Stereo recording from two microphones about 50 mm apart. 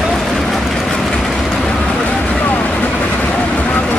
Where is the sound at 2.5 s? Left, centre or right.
Left.